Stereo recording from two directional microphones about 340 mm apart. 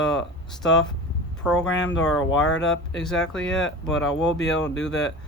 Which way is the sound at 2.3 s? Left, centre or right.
Left.